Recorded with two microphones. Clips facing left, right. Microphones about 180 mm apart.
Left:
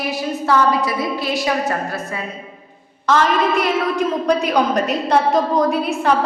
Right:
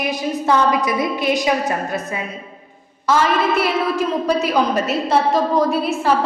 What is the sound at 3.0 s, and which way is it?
A woman's voice, 5° right (ahead or behind).